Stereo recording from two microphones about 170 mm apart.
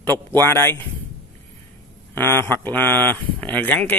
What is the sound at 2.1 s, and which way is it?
Speech, 15° left (ahead or behind).